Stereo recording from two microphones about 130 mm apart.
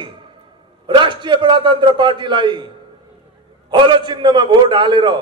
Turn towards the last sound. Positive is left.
turn(degrees=-35)  # may be behind; listen again after turning